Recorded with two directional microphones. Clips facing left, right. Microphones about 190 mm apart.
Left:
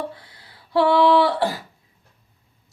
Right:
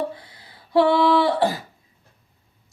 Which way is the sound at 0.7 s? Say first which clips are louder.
Left 1 dB; 20° right (ahead or behind).